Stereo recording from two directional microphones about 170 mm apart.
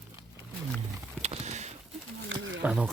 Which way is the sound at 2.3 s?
90° right.